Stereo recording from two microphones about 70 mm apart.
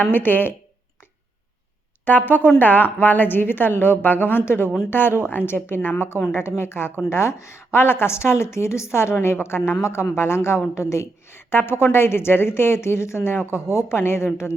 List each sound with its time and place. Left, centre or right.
0.0 s a woman's voice: left
2.0 s a woman's voice: left